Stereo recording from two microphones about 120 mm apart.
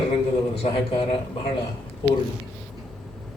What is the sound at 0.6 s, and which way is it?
Speech, 50° left (ahead or behind).